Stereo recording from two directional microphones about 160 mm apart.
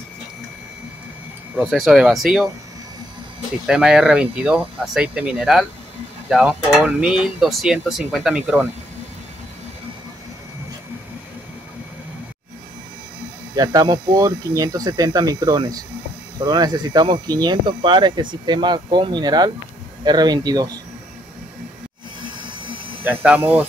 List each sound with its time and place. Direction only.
1.6 s speech: centre (ahead or behind)
3.6 s speech: 5° right (ahead or behind)
13.6 s speech: 20° right (ahead or behind)
23.0 s speech: 10° right (ahead or behind)